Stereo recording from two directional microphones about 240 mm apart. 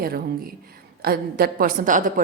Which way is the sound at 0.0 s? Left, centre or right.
Right.